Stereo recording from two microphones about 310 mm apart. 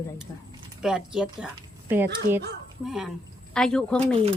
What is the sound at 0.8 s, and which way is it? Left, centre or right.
Speech, centre.